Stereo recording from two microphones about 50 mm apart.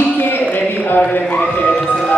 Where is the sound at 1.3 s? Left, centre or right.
Left.